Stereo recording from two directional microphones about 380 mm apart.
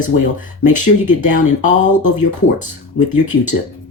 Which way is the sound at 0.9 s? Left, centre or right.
Left.